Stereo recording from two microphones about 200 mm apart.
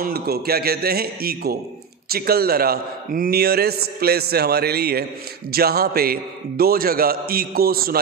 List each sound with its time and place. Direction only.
0.0 s a man's voice: 50° right (ahead or behind)